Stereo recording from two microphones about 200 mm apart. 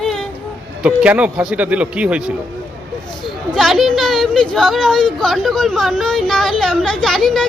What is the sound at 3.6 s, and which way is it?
Speech, centre (ahead or behind).